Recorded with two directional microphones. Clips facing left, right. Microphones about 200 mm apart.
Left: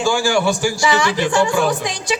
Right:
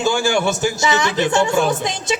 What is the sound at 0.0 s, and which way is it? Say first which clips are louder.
A woman's voice: left 1 dB; 20° right (ahead or behind).